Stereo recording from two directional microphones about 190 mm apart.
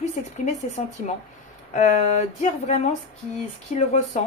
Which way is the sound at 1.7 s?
35° left (ahead or behind).